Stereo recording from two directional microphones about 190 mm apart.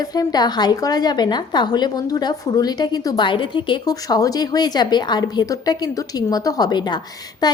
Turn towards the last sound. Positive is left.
turn(degrees=20)  # may be behind; listen again after turning